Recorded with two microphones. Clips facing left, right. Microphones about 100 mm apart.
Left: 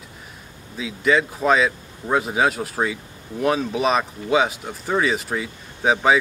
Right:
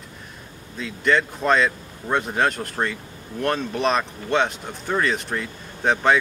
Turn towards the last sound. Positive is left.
turn(degrees=5)  # may be behind; listen again after turning